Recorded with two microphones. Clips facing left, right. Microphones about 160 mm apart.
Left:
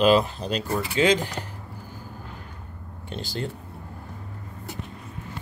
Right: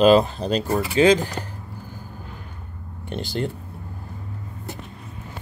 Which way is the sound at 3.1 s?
60° right (ahead or behind).